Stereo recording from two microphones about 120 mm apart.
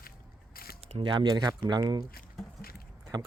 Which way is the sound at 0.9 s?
40° right (ahead or behind).